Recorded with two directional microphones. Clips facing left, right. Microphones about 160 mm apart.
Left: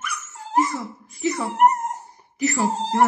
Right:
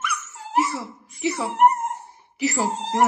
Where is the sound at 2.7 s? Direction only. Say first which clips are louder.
Left 3 dB; 35° left (ahead or behind).